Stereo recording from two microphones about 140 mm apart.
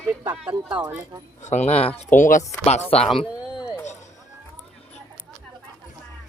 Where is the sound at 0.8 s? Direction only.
20° right (ahead or behind).